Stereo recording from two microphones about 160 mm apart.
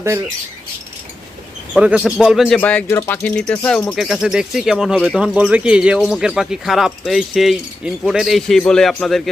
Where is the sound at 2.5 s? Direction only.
10° left (ahead or behind).